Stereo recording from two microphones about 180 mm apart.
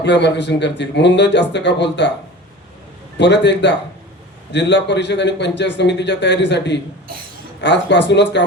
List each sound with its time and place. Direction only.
0.0 s a man's voice: 75° left (ahead or behind)
3.2 s a man's voice: 75° left (ahead or behind)